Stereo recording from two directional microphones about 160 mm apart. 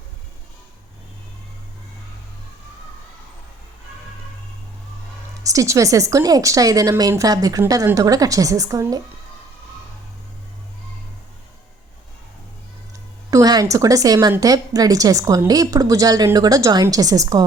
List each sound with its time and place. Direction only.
5.5 s a woman's voice: 20° right (ahead or behind)
13.3 s a woman's voice: 25° right (ahead or behind)